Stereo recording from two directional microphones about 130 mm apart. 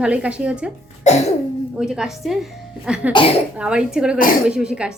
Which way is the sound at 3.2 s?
40° left (ahead or behind).